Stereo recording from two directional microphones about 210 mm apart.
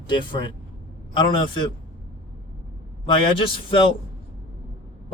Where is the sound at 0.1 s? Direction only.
25° left (ahead or behind).